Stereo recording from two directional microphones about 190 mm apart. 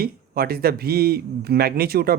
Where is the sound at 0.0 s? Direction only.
55° right (ahead or behind).